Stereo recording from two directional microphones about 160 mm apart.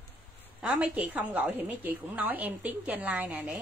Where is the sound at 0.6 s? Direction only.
5° right (ahead or behind).